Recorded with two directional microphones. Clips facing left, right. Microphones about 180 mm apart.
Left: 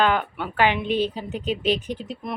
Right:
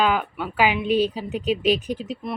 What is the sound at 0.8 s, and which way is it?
Speech, 35° right (ahead or behind).